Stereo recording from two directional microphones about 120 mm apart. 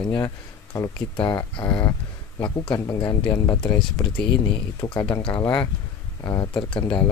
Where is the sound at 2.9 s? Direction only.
30° left (ahead or behind).